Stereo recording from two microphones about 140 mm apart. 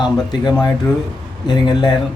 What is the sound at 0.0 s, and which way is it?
Speech, 30° left (ahead or behind).